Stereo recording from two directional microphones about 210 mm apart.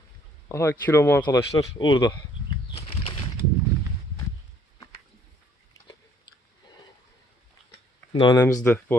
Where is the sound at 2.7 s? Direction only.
30° left (ahead or behind).